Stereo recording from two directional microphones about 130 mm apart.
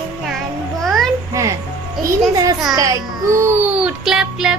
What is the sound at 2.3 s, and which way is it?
A child's voice, 30° right (ahead or behind).